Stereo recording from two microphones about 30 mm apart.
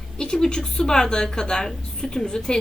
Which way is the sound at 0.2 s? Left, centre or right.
Left.